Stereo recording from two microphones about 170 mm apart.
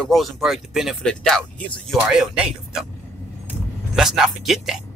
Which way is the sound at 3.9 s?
5° right (ahead or behind).